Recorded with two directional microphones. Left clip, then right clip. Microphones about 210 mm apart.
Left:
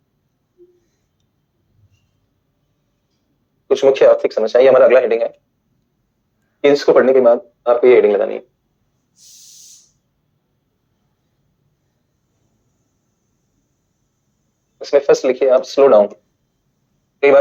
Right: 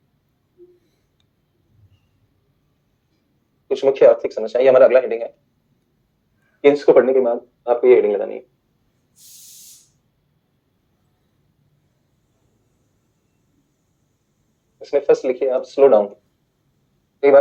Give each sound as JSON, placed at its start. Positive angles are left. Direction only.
{"t": 3.7, "sound": "speech", "side_deg": 30}
{"t": 6.6, "sound": "speech", "side_deg": 30}
{"t": 14.8, "sound": "speech", "side_deg": 30}
{"t": 17.2, "sound": "speech", "side_deg": 25}